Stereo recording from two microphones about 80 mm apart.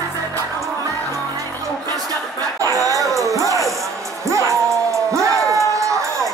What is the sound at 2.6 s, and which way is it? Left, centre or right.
Music, right.